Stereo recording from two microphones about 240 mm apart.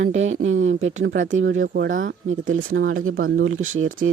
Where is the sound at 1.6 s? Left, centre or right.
Right.